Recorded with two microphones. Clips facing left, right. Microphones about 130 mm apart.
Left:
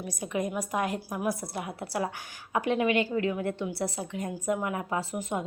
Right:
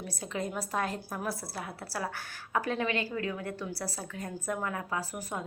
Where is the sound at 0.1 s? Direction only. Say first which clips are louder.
Left 5 dB; 15° left (ahead or behind).